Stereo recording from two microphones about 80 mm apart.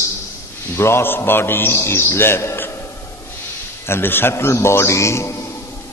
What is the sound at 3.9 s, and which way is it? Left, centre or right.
A man's voice, left.